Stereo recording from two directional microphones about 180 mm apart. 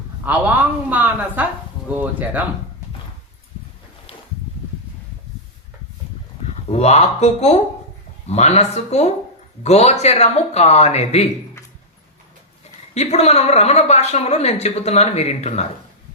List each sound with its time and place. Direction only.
0.3 s a woman's voice: 10° right (ahead or behind)
6.7 s a woman's voice: 35° left (ahead or behind)
12.9 s a woman's voice: 35° left (ahead or behind)